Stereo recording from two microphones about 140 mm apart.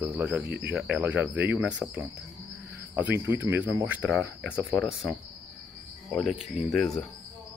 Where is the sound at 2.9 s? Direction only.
15° right (ahead or behind); by 7.0 s 5° left (ahead or behind).